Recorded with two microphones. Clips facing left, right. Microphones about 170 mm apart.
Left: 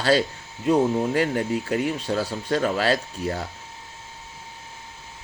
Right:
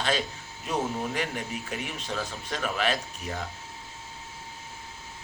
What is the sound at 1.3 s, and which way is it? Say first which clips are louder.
Speech: left 10 dB; 85° left.